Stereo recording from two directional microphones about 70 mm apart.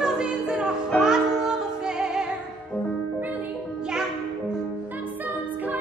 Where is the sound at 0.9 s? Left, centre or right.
Centre.